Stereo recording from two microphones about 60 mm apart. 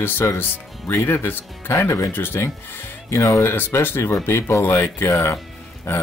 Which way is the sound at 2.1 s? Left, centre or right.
Left.